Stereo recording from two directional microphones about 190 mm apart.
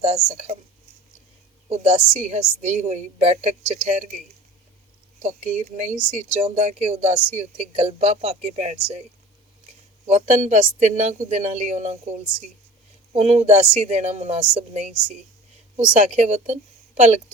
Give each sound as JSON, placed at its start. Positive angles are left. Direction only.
{"t": 0.0, "sound": "speech", "side_deg": -35}
{"t": 1.7, "sound": "speech", "side_deg": -35}
{"t": 5.2, "sound": "speech", "side_deg": -40}
{"t": 10.1, "sound": "speech", "side_deg": -40}